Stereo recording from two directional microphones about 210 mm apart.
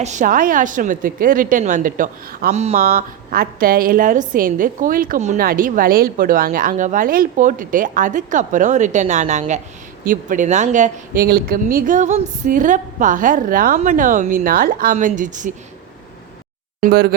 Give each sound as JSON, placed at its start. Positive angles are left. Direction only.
{"t": 0.0, "sound": "a woman's voice", "side_deg": -35}
{"t": 2.8, "sound": "a woman's voice", "side_deg": -45}
{"t": 16.8, "sound": "speech", "side_deg": -45}